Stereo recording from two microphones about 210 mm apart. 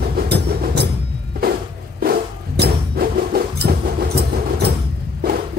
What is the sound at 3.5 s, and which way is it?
Music, 50° right (ahead or behind).